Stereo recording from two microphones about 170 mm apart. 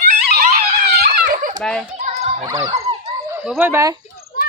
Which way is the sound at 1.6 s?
5° left (ahead or behind).